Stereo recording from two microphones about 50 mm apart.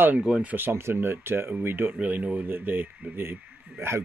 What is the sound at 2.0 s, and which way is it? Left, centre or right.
Speech, right.